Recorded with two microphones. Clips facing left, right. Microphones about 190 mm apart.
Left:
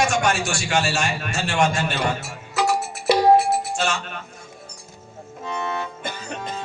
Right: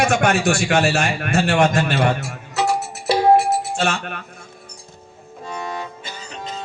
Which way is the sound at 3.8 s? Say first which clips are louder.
Right 3 dB; 60° right (ahead or behind).